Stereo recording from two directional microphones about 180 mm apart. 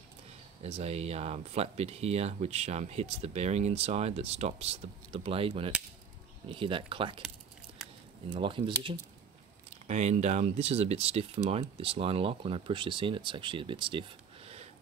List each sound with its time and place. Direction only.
0.6 s speech: 35° right (ahead or behind)
8.4 s speech: 30° right (ahead or behind)
9.8 s speech: 40° right (ahead or behind)